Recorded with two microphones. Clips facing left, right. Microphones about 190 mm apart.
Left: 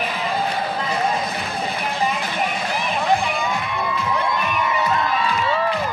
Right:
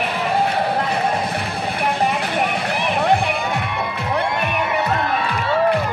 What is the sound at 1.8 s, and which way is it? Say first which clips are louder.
Music: right 5 dB; 65° right (ahead or behind).